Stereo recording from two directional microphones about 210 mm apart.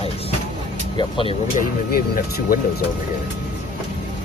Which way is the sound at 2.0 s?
45° left (ahead or behind).